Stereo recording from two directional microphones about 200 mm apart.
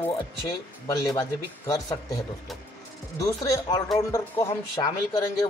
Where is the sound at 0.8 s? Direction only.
15° left (ahead or behind).